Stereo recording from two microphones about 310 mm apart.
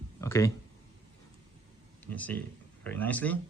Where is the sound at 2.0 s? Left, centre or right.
Centre.